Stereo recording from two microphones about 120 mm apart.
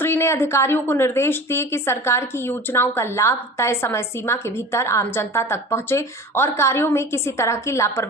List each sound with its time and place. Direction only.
0.0 s a woman's voice: 20° left (ahead or behind)